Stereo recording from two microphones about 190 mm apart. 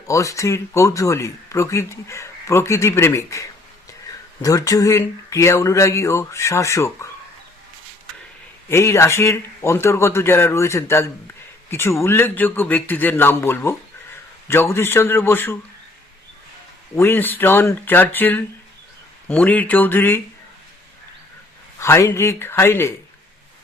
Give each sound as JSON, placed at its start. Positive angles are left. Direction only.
{"t": 0.1, "sound": "speech", "side_deg": 15}
{"t": 4.4, "sound": "speech", "side_deg": 20}
{"t": 8.7, "sound": "speech", "side_deg": 15}
{"t": 16.9, "sound": "speech", "side_deg": 10}
{"t": 21.8, "sound": "speech", "side_deg": 15}